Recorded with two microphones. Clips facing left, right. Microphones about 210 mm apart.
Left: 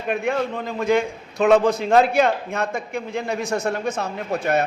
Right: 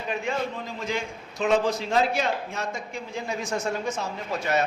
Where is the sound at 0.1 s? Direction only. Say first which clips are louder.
Left 6 dB; 60° left (ahead or behind).